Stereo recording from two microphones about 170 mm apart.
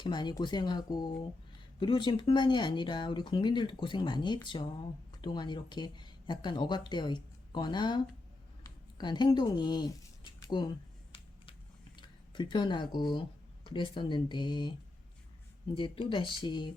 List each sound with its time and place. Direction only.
0.0 s speech: 25° left (ahead or behind)
10.4 s a sound: 25° left (ahead or behind)
11.9 s speech: 25° left (ahead or behind)
15.8 s speech: 30° left (ahead or behind)